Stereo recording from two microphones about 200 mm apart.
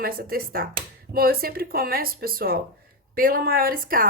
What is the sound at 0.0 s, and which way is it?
A woman's voice, 50° right (ahead or behind).